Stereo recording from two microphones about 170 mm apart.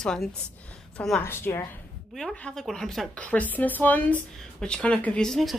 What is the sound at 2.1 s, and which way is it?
A woman's voice, centre (ahead or behind).